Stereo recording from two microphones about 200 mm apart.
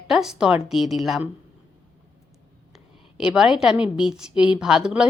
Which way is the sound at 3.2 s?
5° right (ahead or behind).